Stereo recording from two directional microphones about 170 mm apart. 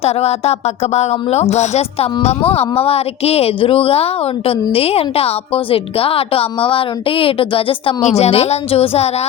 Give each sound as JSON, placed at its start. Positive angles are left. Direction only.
{"t": 0.0, "sound": "a woman's voice", "side_deg": 40}